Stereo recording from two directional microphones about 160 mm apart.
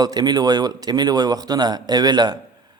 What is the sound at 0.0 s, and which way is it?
A man's voice, 25° right (ahead or behind).